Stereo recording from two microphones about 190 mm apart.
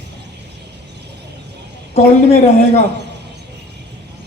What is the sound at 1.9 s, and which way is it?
Speech, 35° left (ahead or behind).